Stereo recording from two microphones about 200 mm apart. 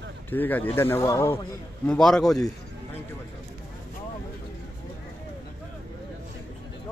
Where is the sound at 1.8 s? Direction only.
Centre (ahead or behind).